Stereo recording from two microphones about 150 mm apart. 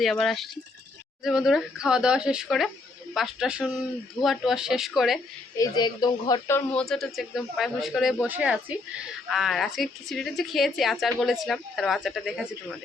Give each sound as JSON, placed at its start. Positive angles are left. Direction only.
{"t": 0.0, "sound": "a woman's voice", "side_deg": 0}
{"t": 5.5, "sound": "speech", "side_deg": 25}
{"t": 6.7, "sound": "a woman's voice", "side_deg": 5}